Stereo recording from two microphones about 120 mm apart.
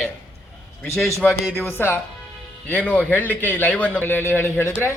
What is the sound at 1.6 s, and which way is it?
A man's voice, 20° left (ahead or behind).